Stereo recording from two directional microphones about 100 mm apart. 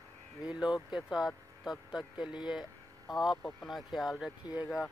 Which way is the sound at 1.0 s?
5° right (ahead or behind).